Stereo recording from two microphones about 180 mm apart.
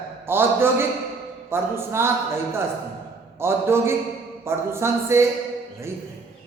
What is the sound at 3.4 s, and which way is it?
A woman's voice, 15° right (ahead or behind).